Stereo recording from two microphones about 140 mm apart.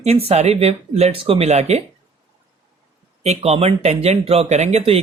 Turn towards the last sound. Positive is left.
turn(degrees=-45)  # may be behind; listen again after turning